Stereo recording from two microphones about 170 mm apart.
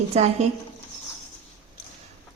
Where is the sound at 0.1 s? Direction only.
40° right (ahead or behind).